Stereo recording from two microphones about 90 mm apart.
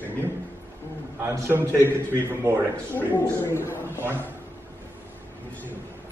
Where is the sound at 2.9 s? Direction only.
20° left (ahead or behind).